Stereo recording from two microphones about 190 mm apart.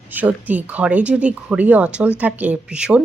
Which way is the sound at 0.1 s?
10° right (ahead or behind).